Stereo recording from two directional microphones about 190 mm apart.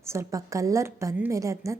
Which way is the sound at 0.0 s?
15° right (ahead or behind).